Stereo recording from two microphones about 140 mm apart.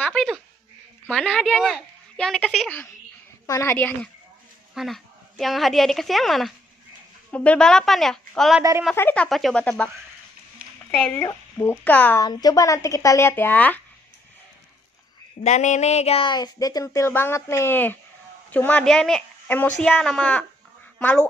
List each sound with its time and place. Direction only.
0.0 s a sound: 5° left (ahead or behind)
1.2 s a woman's voice: centre (ahead or behind)
3.4 s speech: 20° left (ahead or behind)
4.7 s a woman's voice: centre (ahead or behind)
10.9 s speech: 15° left (ahead or behind)
12.2 s speech: 25° left (ahead or behind)
15.4 s a sound: 60° left (ahead or behind)
16.3 s speech: 30° left (ahead or behind); by 21.3 s 10° left (ahead or behind)